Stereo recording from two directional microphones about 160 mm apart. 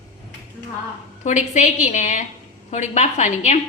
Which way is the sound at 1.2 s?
50° left (ahead or behind).